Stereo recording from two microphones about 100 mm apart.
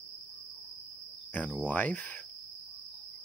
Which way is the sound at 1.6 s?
15° left (ahead or behind).